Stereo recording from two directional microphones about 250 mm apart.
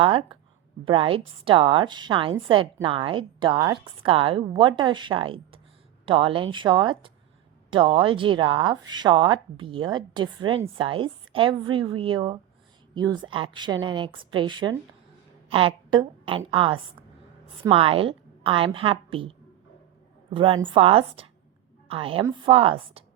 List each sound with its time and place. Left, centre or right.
0.0 s a woman's voice: centre
20.3 s a woman's voice: right